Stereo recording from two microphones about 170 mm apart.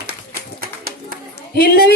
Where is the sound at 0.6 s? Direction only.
60° right (ahead or behind).